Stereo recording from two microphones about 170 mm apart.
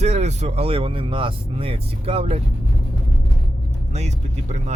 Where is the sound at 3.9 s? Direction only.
40° right (ahead or behind).